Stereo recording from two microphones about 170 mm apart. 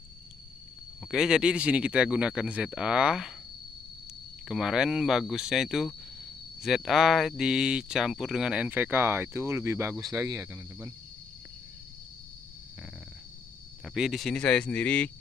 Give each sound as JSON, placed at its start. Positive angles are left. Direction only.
{"t": 1.0, "sound": "speech", "side_deg": -5}
{"t": 4.5, "sound": "speech", "side_deg": -5}
{"t": 13.8, "sound": "speech", "side_deg": 0}